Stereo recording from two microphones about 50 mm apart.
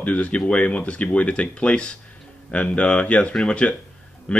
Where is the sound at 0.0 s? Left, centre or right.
Left.